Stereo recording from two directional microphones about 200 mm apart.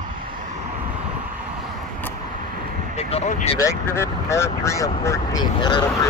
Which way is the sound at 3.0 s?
35° left (ahead or behind).